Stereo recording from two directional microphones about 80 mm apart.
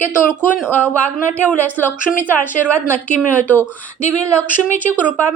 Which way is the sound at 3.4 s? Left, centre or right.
Left.